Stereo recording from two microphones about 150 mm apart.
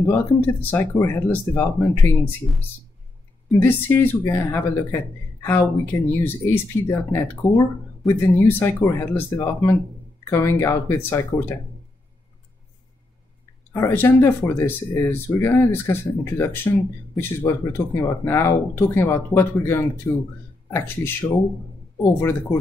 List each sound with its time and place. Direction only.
0.0 s speech: 15° left (ahead or behind)
3.5 s speech: 15° left (ahead or behind)
13.7 s speech: 15° left (ahead or behind)